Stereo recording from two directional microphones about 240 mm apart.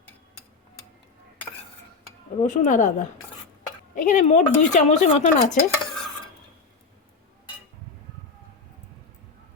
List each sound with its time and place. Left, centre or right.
2.4 s speech: left